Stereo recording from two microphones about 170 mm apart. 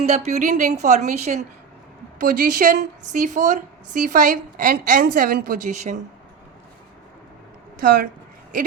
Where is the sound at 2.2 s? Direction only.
50° right (ahead or behind).